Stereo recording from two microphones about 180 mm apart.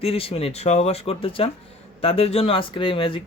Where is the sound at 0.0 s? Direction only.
30° left (ahead or behind).